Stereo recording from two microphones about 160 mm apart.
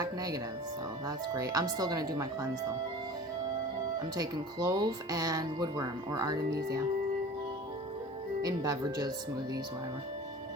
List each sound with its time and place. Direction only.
0.0 s speech: 25° right (ahead or behind)
4.2 s speech: 25° right (ahead or behind)
8.4 s speech: 25° right (ahead or behind)